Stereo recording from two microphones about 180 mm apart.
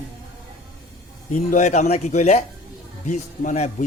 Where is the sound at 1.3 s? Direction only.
40° left (ahead or behind).